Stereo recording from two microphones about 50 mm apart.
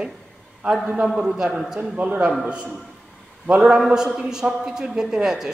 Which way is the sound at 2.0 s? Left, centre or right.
Right.